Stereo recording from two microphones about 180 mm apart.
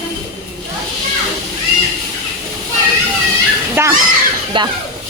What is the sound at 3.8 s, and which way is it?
Speech, 15° right (ahead or behind).